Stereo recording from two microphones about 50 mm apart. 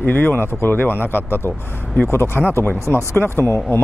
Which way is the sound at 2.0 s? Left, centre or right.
Left.